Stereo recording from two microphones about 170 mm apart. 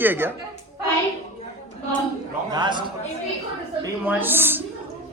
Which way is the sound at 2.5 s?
25° right (ahead or behind).